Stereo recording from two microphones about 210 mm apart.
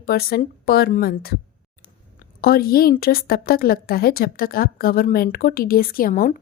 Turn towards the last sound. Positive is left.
turn(degrees=45)  # may be behind; listen again after turning